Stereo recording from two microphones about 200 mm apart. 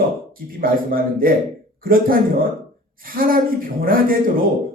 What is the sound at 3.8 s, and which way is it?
Speech, 45° right (ahead or behind).